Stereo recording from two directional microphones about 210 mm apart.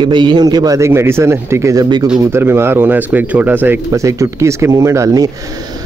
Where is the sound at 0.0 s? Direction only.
20° right (ahead or behind).